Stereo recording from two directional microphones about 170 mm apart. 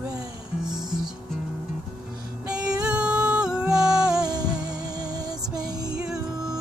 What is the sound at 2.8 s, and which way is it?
Music, 5° right (ahead or behind).